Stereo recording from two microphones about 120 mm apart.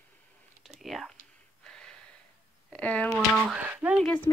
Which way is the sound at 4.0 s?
10° left (ahead or behind).